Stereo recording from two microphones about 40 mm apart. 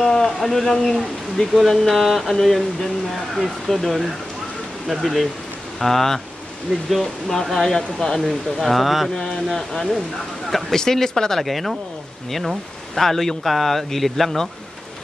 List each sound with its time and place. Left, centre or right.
0.0 s a man's voice: centre
8.2 s speech: centre
9.1 s speech: centre
12.9 s speech: centre